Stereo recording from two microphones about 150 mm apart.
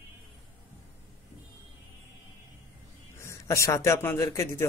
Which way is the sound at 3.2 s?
20° left (ahead or behind).